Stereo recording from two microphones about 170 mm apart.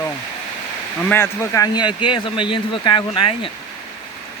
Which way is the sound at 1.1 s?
15° left (ahead or behind).